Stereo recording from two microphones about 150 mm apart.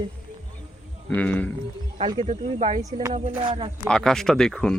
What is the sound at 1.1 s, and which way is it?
Speech, 10° left (ahead or behind).